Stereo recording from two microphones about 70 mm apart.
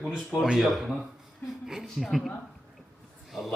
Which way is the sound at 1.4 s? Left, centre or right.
Left.